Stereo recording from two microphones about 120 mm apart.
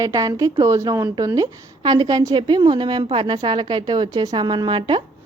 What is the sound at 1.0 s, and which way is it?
A woman's voice, 35° right (ahead or behind).